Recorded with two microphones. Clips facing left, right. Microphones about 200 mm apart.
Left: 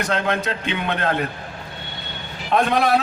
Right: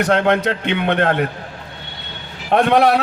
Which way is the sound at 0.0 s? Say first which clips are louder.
Right 7 dB; 65° right (ahead or behind).